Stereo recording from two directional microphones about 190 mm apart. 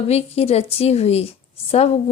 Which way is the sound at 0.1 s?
35° left (ahead or behind).